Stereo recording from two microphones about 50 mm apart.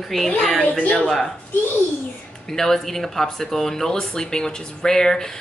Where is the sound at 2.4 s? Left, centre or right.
Centre.